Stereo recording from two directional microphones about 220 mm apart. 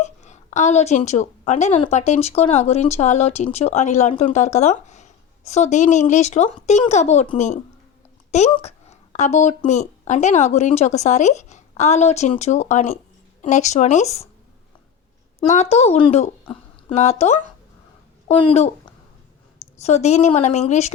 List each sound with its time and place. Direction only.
0.0 s a woman's voice: 30° left (ahead or behind)
15.4 s a woman's voice: 30° left (ahead or behind)
19.8 s a woman's voice: 30° left (ahead or behind)